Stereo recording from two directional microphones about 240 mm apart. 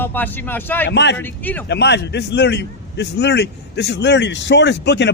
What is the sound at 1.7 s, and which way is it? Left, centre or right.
A man's voice, left.